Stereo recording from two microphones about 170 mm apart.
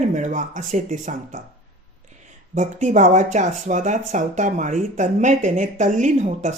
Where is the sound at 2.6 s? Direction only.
45° right (ahead or behind).